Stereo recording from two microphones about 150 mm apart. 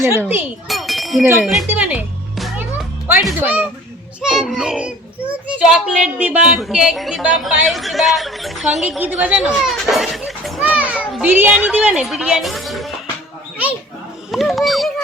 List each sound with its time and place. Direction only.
0.0 s a child's voice: 15° right (ahead or behind)
0.7 s a sound: centre (ahead or behind)
1.2 s a child's voice: 15° right (ahead or behind)
3.4 s a child's voice: 10° right (ahead or behind)
4.2 s a woman's voice: centre (ahead or behind)
10.6 s children playing: 10° right (ahead or behind)
11.1 s a child's voice: 10° right (ahead or behind)
14.3 s a woman's voice: centre (ahead or behind)